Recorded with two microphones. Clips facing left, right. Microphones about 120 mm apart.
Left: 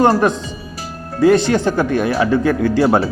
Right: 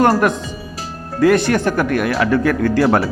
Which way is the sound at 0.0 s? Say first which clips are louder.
Left 1 dB; 20° left (ahead or behind).